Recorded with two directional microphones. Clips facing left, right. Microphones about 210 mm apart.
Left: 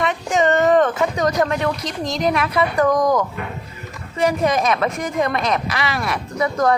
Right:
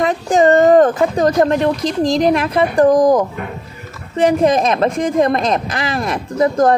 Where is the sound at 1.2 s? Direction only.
35° right (ahead or behind).